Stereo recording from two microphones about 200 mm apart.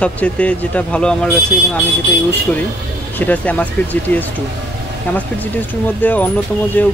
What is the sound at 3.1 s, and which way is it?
Speech, 10° left (ahead or behind).